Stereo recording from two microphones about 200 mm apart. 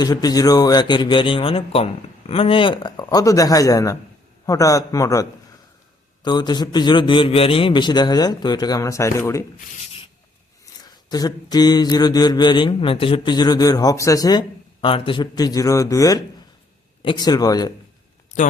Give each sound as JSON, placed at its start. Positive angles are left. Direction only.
{"t": 0.0, "sound": "mantra", "side_deg": 20}
{"t": 4.4, "sound": "a man's voice", "side_deg": 15}
{"t": 6.2, "sound": "mantra", "side_deg": 20}
{"t": 10.8, "sound": "mantra", "side_deg": 20}